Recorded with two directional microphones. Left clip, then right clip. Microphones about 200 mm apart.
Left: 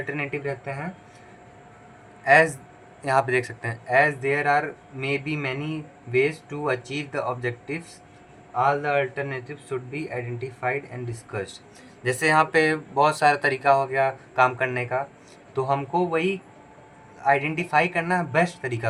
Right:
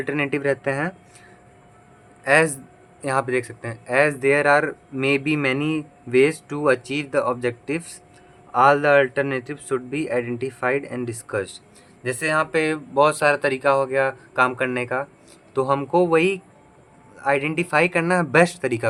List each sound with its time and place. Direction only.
0.0 s a man's voice: 30° right (ahead or behind)
2.2 s speech: 25° right (ahead or behind)
8.5 s a man's voice: 40° right (ahead or behind)